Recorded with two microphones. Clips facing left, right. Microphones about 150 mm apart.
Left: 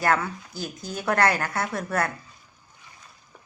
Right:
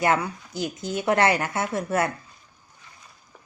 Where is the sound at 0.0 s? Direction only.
20° right (ahead or behind).